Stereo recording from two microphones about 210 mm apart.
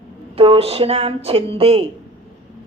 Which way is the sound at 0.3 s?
25° right (ahead or behind).